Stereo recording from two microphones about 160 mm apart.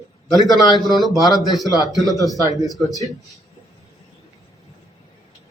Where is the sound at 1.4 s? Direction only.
Centre (ahead or behind).